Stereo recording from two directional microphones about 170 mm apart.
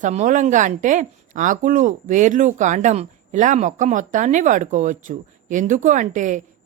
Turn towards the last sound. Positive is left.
turn(degrees=-50)  # may be behind; listen again after turning